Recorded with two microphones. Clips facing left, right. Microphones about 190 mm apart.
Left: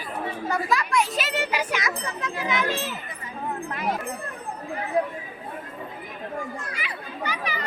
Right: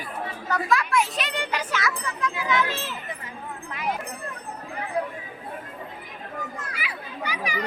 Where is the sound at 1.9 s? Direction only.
20° left (ahead or behind).